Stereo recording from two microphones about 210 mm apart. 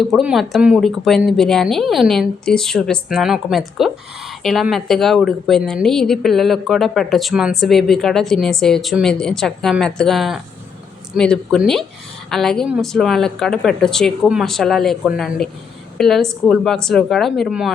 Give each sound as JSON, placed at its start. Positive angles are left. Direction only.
{"t": 0.1, "sound": "a woman's voice", "side_deg": 0}